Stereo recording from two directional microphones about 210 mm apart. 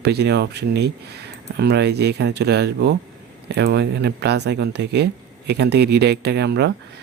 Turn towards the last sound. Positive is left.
turn(degrees=-50)  # may be behind; listen again after turning